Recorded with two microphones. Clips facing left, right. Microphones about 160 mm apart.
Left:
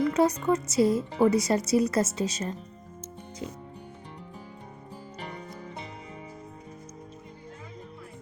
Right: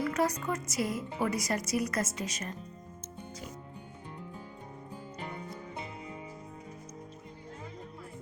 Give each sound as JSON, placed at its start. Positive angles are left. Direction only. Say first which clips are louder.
{"t": 0.0, "sound": "a woman's voice", "louder": "left 7 dB", "side_deg": 25}